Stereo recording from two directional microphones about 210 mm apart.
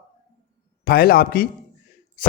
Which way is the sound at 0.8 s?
45° left (ahead or behind).